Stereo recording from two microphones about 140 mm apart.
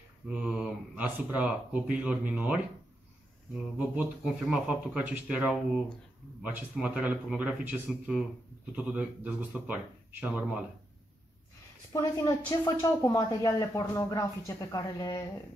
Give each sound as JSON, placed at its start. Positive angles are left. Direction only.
{"t": 0.3, "sound": "speech", "side_deg": -5}
{"t": 3.7, "sound": "speech", "side_deg": -10}
{"t": 11.9, "sound": "speech", "side_deg": 25}